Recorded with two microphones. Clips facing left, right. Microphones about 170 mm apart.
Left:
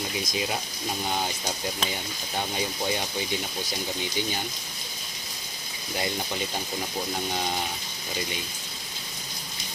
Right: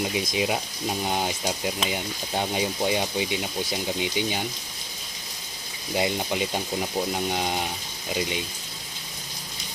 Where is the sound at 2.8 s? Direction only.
15° right (ahead or behind).